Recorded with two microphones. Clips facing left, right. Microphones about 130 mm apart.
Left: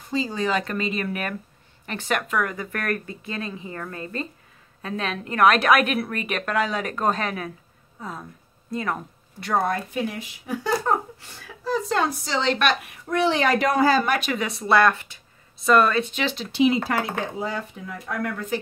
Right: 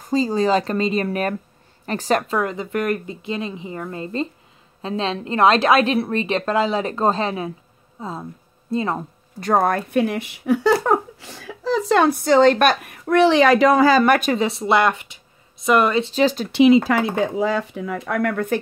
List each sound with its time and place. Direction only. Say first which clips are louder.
0.0 s a woman's voice: right 7 dB; 40° right (ahead or behind)
9.4 s speech: right 5 dB; 50° right (ahead or behind)
13.0 s speech: right 8 dB; 70° right (ahead or behind); by 14.1 s 90° right
14.3 s a woman's voice: right 3 dB; 25° right (ahead or behind)
16.1 s speech: right 9 dB; 40° right (ahead or behind)
16.5 s speech: right 6 dB; 90° right; by 18.6 s 60° right (ahead or behind)